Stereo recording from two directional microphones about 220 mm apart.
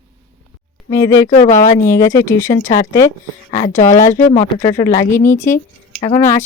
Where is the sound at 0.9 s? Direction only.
15° left (ahead or behind).